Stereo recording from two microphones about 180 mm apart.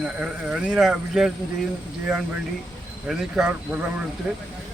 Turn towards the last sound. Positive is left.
turn(degrees=-5)  # may be behind; listen again after turning